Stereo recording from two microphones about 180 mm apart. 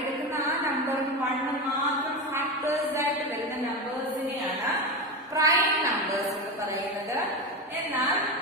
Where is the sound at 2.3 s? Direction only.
15° right (ahead or behind).